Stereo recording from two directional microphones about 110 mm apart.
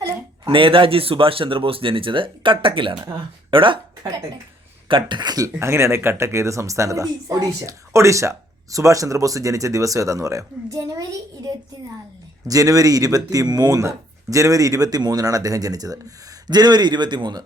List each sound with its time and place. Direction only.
0.0 s speech: 55° right (ahead or behind)
4.9 s speech: 50° right (ahead or behind)
5.5 s speech: 25° right (ahead or behind)
12.5 s speech: 35° right (ahead or behind)